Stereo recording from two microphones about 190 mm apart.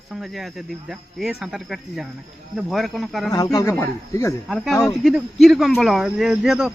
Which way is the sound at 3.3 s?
20° left (ahead or behind).